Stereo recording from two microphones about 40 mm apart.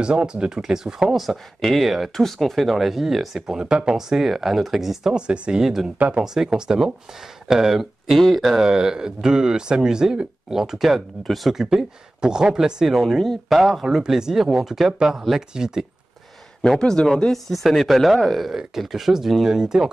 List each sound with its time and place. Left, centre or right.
0.0 s speech: right
1.1 s speech: centre
2.1 s speech: centre
5.1 s speech: right
5.6 s speech: centre
8.1 s speech: centre
8.6 s speech: centre
11.2 s speech: centre
11.5 s speech: centre
13.0 s speech: centre
13.8 s speech: centre
16.6 s speech: centre
17.3 s speech: centre